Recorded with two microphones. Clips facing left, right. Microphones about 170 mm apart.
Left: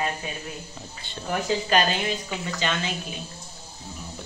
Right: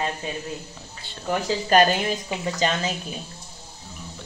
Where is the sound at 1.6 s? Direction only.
45° right (ahead or behind).